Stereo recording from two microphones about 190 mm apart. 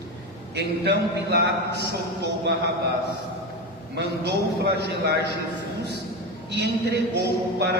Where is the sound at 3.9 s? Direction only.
60° right (ahead or behind).